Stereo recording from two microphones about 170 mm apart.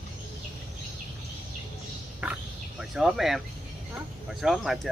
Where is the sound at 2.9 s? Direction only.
Centre (ahead or behind).